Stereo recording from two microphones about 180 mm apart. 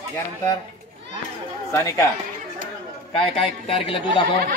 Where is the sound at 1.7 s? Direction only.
15° left (ahead or behind).